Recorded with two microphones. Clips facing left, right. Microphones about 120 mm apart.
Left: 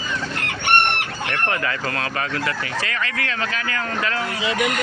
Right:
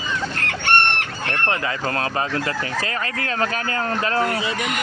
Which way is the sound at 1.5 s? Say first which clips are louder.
Right 1 dB; 30° right (ahead or behind).